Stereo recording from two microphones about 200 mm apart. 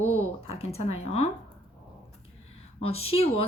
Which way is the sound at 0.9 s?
30° left (ahead or behind).